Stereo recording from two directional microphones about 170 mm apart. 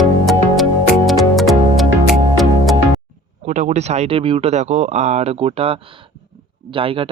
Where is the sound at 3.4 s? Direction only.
45° right (ahead or behind).